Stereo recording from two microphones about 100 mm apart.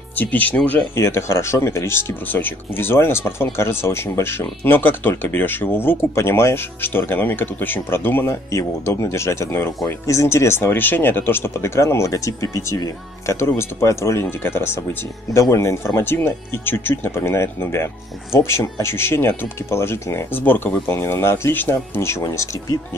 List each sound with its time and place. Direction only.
0.1 s speech: 15° left (ahead or behind)
0.9 s speech: 25° left (ahead or behind)